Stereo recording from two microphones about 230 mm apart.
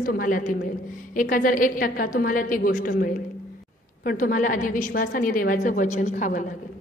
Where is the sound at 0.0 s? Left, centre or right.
Left.